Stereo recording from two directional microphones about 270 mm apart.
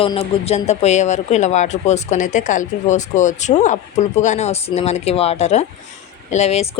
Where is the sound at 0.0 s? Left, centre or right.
Left.